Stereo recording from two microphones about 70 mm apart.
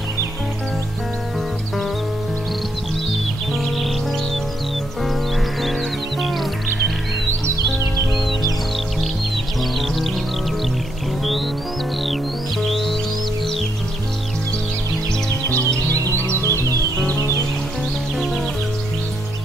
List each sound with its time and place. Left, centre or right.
3.5 s music: centre
6.2 s music: centre
9.8 s music: centre
12.6 s music: centre
16.3 s music: left